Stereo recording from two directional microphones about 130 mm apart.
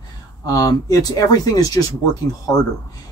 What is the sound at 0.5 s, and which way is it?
Speech, 25° left (ahead or behind).